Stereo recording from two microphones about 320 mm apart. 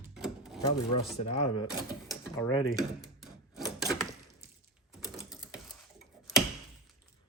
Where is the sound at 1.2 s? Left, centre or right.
Left.